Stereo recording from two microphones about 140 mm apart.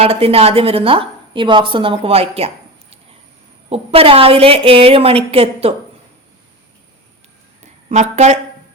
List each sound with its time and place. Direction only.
0.0 s a woman's voice: 45° right (ahead or behind)
3.7 s a woman's voice: 45° right (ahead or behind)
7.9 s a woman's voice: 55° right (ahead or behind)